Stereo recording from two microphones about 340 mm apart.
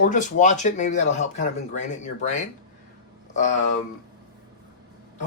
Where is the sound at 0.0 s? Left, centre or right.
Left.